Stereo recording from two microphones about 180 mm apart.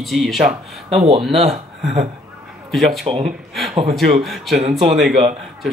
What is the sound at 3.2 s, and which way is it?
A man's voice, centre (ahead or behind).